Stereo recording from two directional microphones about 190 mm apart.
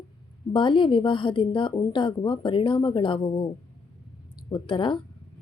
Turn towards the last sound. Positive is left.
turn(degrees=25)  # may be behind; listen again after turning